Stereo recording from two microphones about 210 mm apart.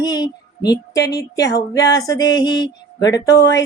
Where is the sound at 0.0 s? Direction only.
20° left (ahead or behind).